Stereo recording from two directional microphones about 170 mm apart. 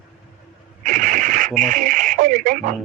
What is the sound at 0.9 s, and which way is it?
Radio, 50° right (ahead or behind).